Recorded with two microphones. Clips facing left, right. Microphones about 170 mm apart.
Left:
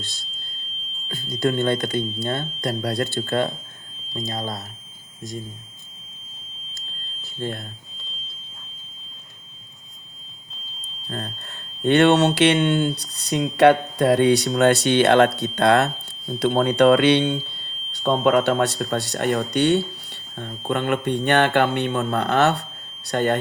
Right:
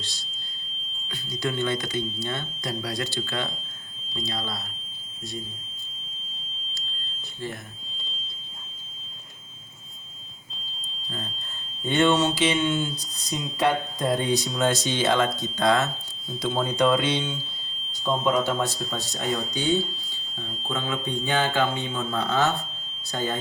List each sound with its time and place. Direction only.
1.0 s speech: 50° left (ahead or behind)
7.4 s speech: 55° left (ahead or behind)
11.8 s speech: 65° left (ahead or behind)